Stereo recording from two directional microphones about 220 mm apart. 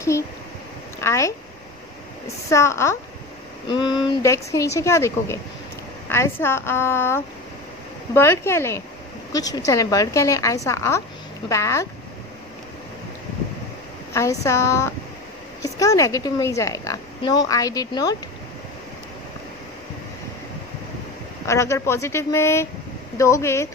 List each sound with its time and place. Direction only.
1.0 s speech: 15° left (ahead or behind)
2.5 s speech: 10° left (ahead or behind)
14.1 s speech: 15° left (ahead or behind)
21.5 s speech: 15° left (ahead or behind)